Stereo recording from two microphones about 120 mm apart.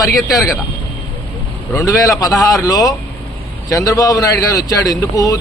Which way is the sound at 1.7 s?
30° left (ahead or behind).